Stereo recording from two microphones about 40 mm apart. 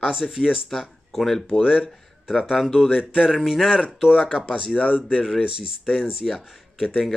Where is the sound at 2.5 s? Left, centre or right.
Centre.